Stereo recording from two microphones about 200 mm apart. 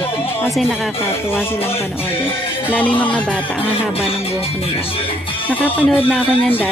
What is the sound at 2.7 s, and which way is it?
Speech, 10° left (ahead or behind).